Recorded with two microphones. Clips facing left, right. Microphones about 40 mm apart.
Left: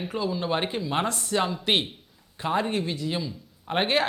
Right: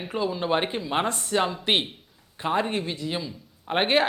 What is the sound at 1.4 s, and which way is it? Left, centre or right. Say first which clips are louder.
Speech: right 1 dB; centre.